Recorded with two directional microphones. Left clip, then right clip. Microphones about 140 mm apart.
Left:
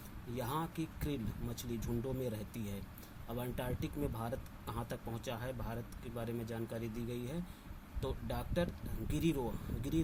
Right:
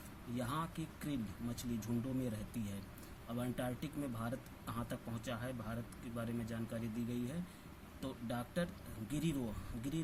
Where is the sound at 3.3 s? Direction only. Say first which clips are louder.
Left 1 dB; 35° left (ahead or behind).